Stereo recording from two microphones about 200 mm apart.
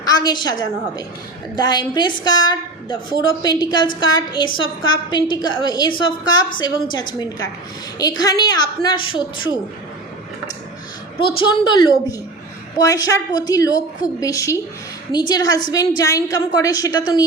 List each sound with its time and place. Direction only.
0.0 s a woman's voice: 20° left (ahead or behind)
11.2 s a woman's voice: 25° left (ahead or behind)